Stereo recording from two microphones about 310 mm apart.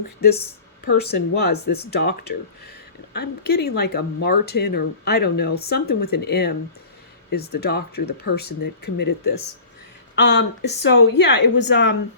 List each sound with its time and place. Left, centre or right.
0.9 s speech: left